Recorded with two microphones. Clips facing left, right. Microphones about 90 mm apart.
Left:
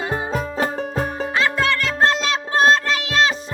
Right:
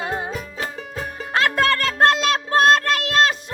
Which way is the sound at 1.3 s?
55° right (ahead or behind).